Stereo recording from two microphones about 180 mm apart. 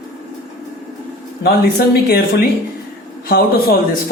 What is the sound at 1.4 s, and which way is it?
Speech, 65° left (ahead or behind).